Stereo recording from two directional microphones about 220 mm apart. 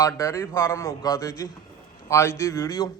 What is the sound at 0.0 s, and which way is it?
A man's voice, 15° left (ahead or behind).